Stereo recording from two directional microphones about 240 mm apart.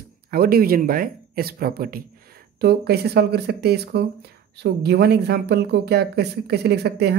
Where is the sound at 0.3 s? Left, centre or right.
Right.